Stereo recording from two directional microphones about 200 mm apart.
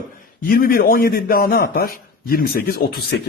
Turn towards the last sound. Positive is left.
turn(degrees=50)  # may be behind; listen again after turning